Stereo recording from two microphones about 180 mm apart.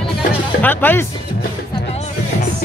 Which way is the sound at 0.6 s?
10° left (ahead or behind).